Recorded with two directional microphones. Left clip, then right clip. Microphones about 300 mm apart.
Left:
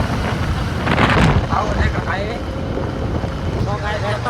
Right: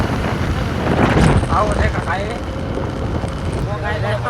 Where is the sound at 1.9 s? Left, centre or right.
Centre.